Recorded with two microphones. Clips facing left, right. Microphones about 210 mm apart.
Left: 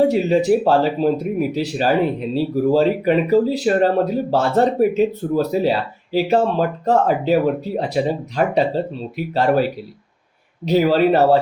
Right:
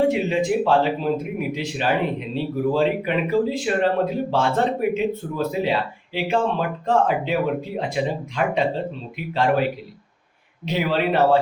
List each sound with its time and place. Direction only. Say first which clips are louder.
0.0 s speech: left 4 dB; 40° left (ahead or behind)